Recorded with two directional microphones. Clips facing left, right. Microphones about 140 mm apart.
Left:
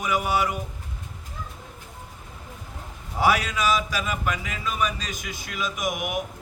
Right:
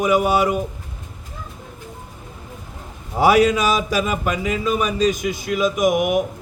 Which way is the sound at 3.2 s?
15° right (ahead or behind).